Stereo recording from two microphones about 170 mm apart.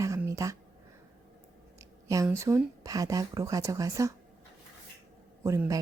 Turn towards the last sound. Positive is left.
turn(degrees=-20)  # may be behind; listen again after turning